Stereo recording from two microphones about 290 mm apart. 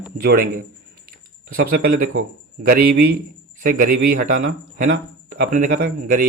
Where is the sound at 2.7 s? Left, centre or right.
Right.